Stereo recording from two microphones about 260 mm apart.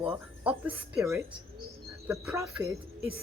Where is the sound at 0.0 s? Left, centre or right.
Centre.